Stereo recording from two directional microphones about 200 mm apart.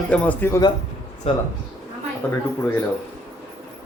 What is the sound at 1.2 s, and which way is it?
Speech, 30° left (ahead or behind).